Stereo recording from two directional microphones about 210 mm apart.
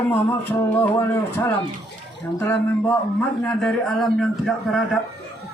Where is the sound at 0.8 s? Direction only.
10° left (ahead or behind).